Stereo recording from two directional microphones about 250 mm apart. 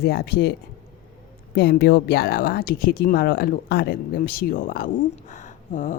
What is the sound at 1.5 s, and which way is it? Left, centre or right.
Speech, left.